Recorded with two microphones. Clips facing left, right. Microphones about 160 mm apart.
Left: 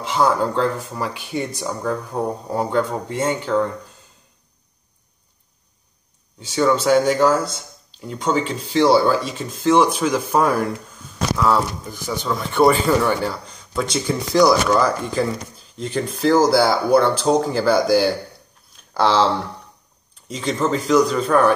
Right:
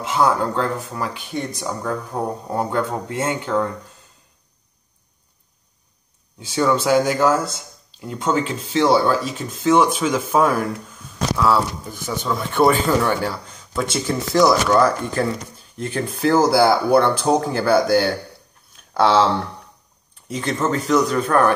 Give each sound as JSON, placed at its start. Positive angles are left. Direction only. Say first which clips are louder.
{"t": 0.0, "sound": "speech", "louder": "even", "side_deg": 0}
{"t": 6.5, "sound": "speech", "louder": "left 1 dB", "side_deg": 0}
{"t": 18.7, "sound": "a sound", "louder": "right 1 dB", "side_deg": 0}
{"t": 20.2, "sound": "speech", "louder": "left 1 dB", "side_deg": -5}